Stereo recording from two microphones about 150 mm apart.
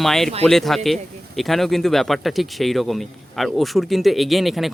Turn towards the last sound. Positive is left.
turn(degrees=0)  # may be behind; listen again after turning